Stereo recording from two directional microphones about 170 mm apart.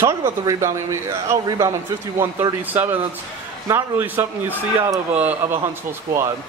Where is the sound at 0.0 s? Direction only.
15° right (ahead or behind).